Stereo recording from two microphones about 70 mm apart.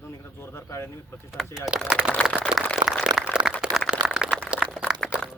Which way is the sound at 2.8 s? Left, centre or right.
Right.